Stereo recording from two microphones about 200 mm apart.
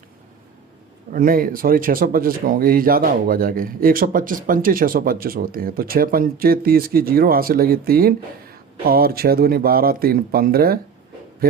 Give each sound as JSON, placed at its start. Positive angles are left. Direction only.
{"t": 1.1, "sound": "speech", "side_deg": -45}